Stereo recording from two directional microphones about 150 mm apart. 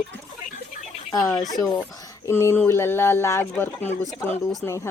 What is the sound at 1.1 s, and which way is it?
Speech, 25° left (ahead or behind).